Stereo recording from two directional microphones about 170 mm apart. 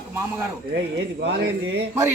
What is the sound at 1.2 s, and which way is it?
Speech, 90° right.